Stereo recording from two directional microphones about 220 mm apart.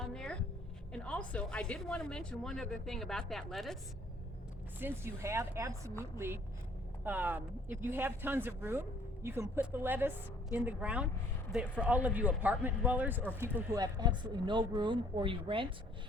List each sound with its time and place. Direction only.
0.0 s a sound: 5° left (ahead or behind)
0.9 s a woman's voice: 5° left (ahead or behind)
4.8 s a woman's voice: 10° right (ahead or behind)